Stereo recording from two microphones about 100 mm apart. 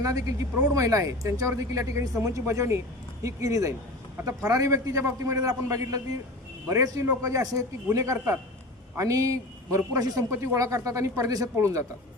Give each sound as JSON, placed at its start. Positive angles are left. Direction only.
{"t": 0.0, "sound": "speech", "side_deg": -35}